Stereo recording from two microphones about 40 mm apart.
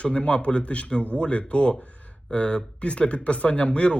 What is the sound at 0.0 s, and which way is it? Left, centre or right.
A man's voice, left.